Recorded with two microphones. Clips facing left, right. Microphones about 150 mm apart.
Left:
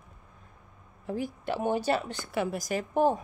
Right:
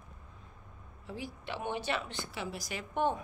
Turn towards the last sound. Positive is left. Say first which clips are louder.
# left 7 dB
turn(degrees=35)  # may be behind; listen again after turning